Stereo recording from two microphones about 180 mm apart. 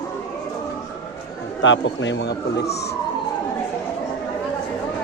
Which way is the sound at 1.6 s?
90° left.